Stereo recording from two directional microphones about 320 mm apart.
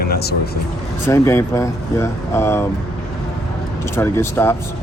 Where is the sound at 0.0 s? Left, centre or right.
Left.